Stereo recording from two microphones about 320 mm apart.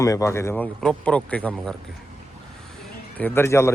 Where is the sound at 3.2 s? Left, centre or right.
Centre.